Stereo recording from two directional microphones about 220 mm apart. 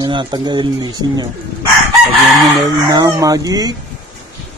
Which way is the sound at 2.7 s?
15° right (ahead or behind).